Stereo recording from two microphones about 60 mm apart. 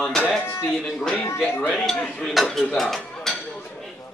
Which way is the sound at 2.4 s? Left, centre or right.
Centre.